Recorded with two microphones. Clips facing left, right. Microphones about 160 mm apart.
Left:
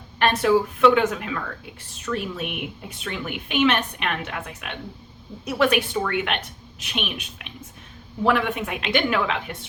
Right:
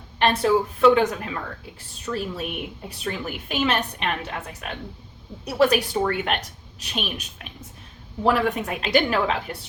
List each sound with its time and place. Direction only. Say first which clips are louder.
0.2 s a woman's voice: left 1 dB; 30° right (ahead or behind)